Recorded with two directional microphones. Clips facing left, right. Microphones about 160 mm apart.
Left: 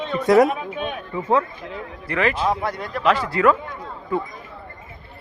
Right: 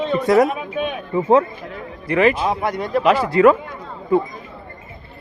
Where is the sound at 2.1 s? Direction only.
15° right (ahead or behind).